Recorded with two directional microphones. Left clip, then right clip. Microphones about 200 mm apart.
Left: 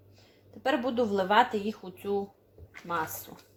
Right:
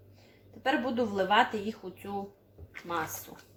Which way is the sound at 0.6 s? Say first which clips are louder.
Left 2 dB; 40° left (ahead or behind).